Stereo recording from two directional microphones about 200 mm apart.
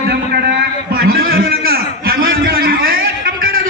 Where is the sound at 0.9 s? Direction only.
50° right (ahead or behind).